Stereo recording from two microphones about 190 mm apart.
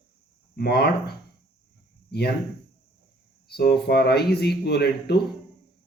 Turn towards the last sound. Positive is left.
turn(degrees=60)  # may be behind; listen again after turning